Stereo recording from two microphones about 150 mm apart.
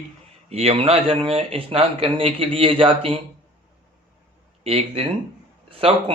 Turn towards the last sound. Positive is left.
turn(degrees=-40)  # may be behind; listen again after turning